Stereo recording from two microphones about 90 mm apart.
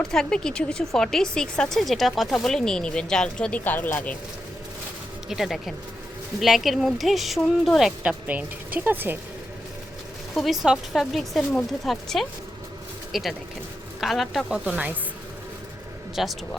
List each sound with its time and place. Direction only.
0.0 s speech: 5° left (ahead or behind)
3.6 s speech: 20° left (ahead or behind)
5.3 s speech: centre (ahead or behind)
8.0 s a woman's voice: 15° right (ahead or behind)
10.3 s speech: centre (ahead or behind)
14.6 s speech: 15° right (ahead or behind)
16.1 s speech: centre (ahead or behind)